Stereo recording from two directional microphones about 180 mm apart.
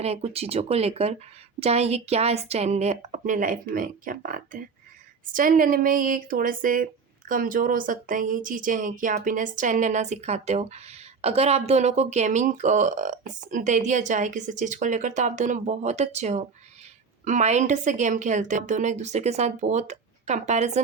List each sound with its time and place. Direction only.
0.0 s a woman's voice: 35° right (ahead or behind)